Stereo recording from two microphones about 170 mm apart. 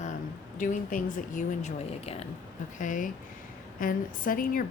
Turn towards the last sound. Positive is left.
turn(degrees=55)  # may be behind; listen again after turning